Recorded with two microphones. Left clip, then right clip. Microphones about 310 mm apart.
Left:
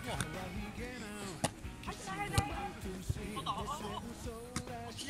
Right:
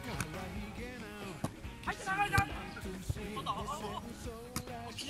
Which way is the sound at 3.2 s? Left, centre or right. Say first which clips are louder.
Right 1 dB; centre.